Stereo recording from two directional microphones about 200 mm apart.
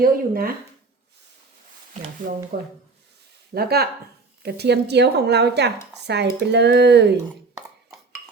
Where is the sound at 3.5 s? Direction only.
50° right (ahead or behind).